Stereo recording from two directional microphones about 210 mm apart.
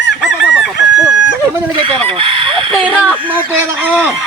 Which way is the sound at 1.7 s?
25° right (ahead or behind).